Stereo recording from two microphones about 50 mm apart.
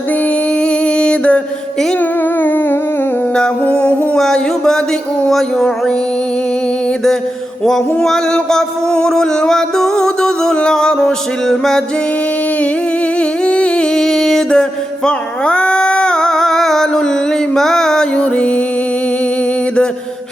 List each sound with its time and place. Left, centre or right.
0.6 s music: centre
2.0 s humming: left
3.6 s a sound: left
5.3 s music: centre
7.6 s music: centre
13.1 s humming: left
13.9 s music: centre